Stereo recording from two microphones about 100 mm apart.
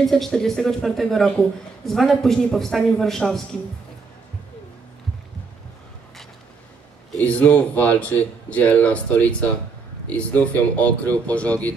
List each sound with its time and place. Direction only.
0.0 s a man's voice: 5° left (ahead or behind)
7.2 s speech: 15° left (ahead or behind)